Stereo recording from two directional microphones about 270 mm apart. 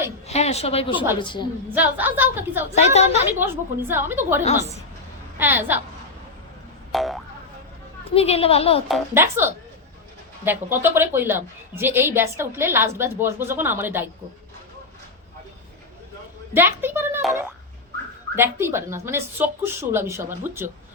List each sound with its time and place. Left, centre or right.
0.3 s a woman's voice: left
1.7 s a woman's voice: centre
2.7 s speech: left
3.3 s a woman's voice: centre
6.9 s boing: centre
8.1 s speech: left
8.9 s a woman's voice: centre
16.6 s a woman's voice: centre